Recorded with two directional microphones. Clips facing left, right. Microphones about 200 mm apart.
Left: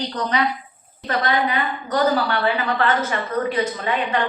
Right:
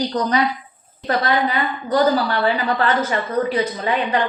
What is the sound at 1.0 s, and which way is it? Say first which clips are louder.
A woman's voice: right 2 dB; 35° right (ahead or behind).